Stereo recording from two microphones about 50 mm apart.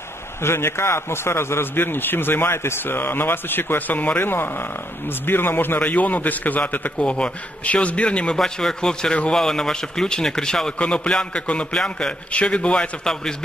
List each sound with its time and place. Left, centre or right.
0.4 s a man's voice: left
5.8 s a man's voice: left
7.0 s a man's voice: left
8.4 s a man's voice: centre
12.3 s a man's voice: left
13.0 s a man's voice: centre